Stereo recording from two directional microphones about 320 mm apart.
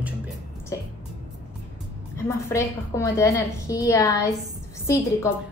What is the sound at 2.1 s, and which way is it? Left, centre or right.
A woman's voice, centre.